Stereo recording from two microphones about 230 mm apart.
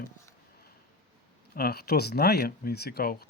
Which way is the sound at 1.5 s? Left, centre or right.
Left.